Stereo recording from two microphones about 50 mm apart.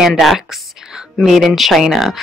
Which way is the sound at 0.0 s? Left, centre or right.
Centre.